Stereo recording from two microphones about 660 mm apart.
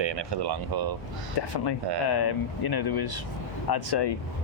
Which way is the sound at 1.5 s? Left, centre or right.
Left.